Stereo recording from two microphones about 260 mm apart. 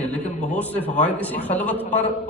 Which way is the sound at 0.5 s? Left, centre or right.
Centre.